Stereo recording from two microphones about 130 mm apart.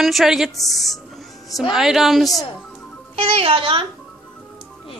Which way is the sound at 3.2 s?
45° right (ahead or behind).